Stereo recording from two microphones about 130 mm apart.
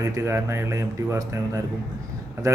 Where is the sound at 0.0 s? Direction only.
20° right (ahead or behind).